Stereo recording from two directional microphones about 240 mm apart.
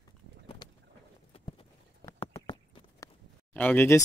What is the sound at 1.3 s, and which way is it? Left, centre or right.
Clip-clop, left.